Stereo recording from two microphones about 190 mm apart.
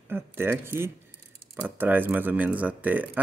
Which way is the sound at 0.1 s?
10° right (ahead or behind).